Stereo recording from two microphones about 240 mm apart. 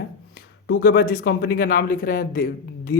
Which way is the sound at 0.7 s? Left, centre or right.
Left.